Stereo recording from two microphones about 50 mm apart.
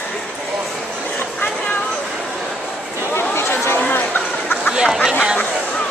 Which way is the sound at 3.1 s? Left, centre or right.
Left.